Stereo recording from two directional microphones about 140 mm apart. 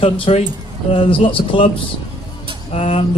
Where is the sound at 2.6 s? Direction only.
45° left (ahead or behind).